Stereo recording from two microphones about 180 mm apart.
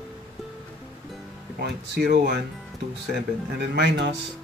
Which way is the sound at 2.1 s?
65° right (ahead or behind).